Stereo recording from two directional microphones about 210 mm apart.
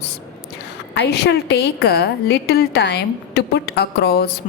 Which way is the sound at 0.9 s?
50° left (ahead or behind).